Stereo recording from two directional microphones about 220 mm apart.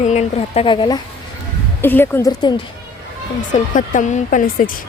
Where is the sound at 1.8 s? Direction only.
10° left (ahead or behind).